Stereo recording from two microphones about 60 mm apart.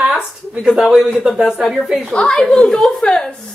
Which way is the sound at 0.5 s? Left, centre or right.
Centre.